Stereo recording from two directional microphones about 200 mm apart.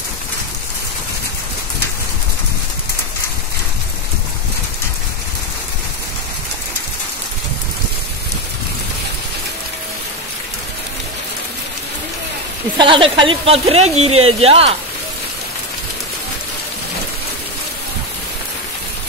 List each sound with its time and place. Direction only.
12.7 s a woman's voice: 25° right (ahead or behind)